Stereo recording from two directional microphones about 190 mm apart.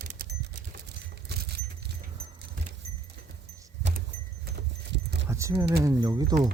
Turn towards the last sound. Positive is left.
turn(degrees=-20)  # may be behind; listen again after turning